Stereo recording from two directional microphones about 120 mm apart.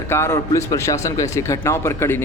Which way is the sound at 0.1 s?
20° left (ahead or behind).